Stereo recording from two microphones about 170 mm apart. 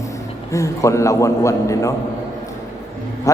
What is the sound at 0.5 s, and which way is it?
A man's voice, 15° left (ahead or behind).